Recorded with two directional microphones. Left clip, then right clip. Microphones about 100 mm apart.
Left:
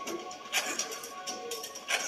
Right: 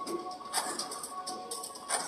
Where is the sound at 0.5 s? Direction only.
20° left (ahead or behind).